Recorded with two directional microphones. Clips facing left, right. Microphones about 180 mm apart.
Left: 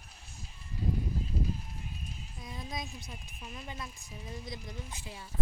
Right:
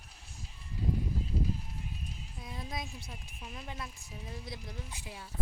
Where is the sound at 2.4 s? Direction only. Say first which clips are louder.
Even; 5° right (ahead or behind).